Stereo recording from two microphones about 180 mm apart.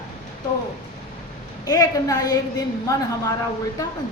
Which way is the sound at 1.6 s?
20° left (ahead or behind).